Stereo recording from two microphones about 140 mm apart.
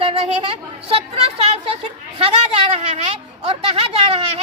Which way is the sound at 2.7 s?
50° right (ahead or behind).